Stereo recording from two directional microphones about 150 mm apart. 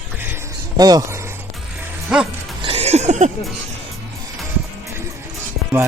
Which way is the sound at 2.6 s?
40° right (ahead or behind).